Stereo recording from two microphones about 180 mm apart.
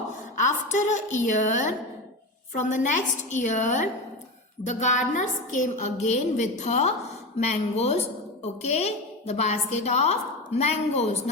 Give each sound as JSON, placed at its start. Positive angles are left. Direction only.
{"t": 0.3, "sound": "a woman's voice", "side_deg": 40}